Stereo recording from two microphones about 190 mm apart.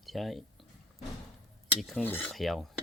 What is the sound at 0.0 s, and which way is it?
Speech, centre (ahead or behind).